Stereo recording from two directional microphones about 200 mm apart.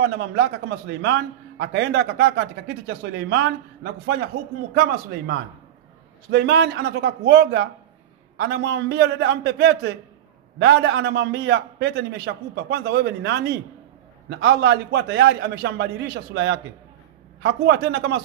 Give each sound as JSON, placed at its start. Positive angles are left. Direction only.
{"t": 0.0, "sound": "a man's voice", "side_deg": -60}
{"t": 4.7, "sound": "a man's voice", "side_deg": -55}